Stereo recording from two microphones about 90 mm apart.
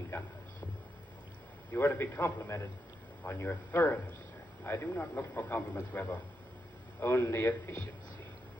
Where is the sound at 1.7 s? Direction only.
20° left (ahead or behind).